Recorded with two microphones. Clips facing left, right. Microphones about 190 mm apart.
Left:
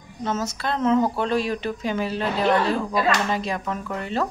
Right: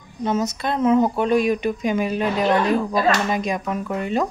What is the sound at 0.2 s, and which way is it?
Speech, 15° right (ahead or behind).